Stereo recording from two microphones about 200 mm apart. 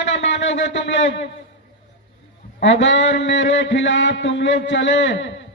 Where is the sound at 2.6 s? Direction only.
65° left (ahead or behind).